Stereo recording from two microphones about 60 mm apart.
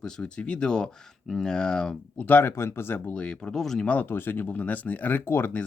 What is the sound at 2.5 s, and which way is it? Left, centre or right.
Speech, left.